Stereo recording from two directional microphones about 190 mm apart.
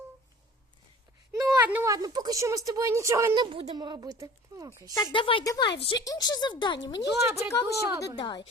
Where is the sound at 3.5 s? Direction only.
25° right (ahead or behind).